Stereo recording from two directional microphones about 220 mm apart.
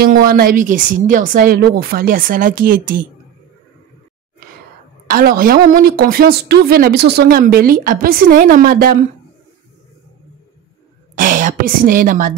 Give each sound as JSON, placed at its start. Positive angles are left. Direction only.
{"t": 0.0, "sound": "a woman's voice", "side_deg": -40}
{"t": 5.0, "sound": "a woman's voice", "side_deg": -40}
{"t": 11.1, "sound": "a woman's voice", "side_deg": -35}